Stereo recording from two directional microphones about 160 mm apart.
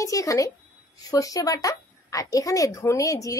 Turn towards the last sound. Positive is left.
turn(degrees=20)  # may be behind; listen again after turning